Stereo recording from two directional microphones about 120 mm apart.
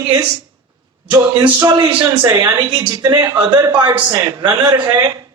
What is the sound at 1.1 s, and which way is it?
A man's voice, 35° right (ahead or behind).